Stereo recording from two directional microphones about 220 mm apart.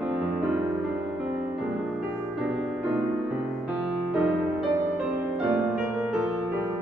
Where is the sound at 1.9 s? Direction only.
Centre (ahead or behind).